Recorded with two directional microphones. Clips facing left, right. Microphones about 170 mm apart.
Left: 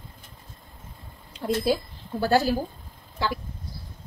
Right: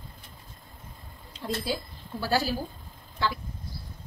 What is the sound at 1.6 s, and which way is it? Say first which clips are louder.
Speech: left 8 dB; 50° left (ahead or behind).